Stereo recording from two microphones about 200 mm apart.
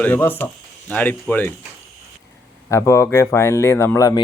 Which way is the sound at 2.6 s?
15° left (ahead or behind).